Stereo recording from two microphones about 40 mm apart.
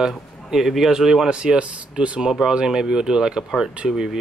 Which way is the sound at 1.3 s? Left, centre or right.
Right.